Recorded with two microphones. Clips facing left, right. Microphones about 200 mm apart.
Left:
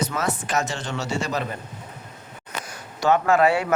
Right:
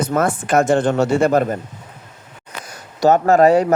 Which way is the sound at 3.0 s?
40° right (ahead or behind).